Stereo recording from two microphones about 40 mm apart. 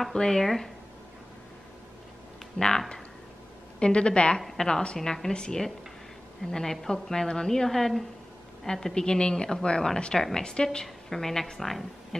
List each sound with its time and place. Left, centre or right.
0.1 s a woman's voice: centre
2.6 s speech: left
3.8 s a woman's voice: left
4.4 s a woman's voice: centre